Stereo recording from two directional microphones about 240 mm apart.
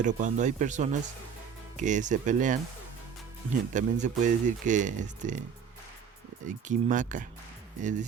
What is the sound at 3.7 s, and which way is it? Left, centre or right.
Speech, right.